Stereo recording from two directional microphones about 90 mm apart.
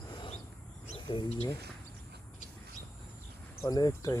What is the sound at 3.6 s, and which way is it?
Speech, 45° left (ahead or behind).